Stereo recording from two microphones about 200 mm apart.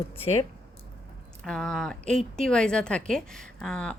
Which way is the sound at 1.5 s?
Centre (ahead or behind).